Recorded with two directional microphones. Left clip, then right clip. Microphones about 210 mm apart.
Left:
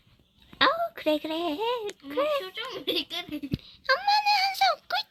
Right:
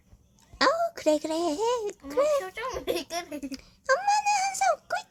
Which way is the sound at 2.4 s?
45° right (ahead or behind).